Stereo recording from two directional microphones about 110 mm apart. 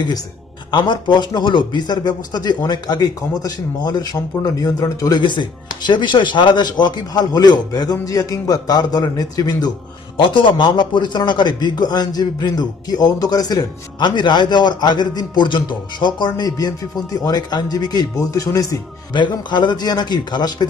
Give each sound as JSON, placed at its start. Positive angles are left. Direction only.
{"t": 0.7, "sound": "speech", "side_deg": 40}
{"t": 10.1, "sound": "speech", "side_deg": 50}
{"t": 19.1, "sound": "speech", "side_deg": 45}